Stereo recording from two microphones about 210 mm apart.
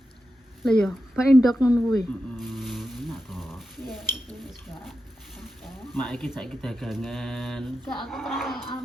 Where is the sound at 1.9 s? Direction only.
Centre (ahead or behind).